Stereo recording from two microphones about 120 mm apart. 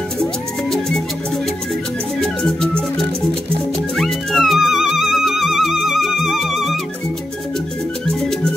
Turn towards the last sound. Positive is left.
turn(degrees=0)  # may be behind; listen again after turning